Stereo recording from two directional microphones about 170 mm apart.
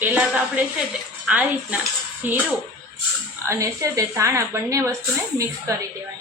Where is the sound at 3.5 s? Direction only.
20° right (ahead or behind).